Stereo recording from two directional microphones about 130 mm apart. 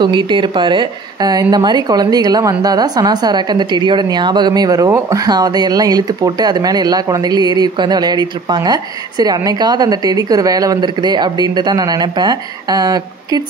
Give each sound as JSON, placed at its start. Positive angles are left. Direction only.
{"t": 0.0, "sound": "speech", "side_deg": -35}